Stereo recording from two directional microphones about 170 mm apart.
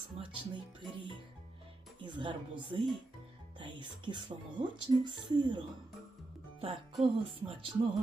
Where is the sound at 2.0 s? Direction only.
30° right (ahead or behind).